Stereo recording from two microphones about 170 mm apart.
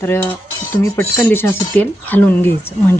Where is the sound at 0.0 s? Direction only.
15° left (ahead or behind).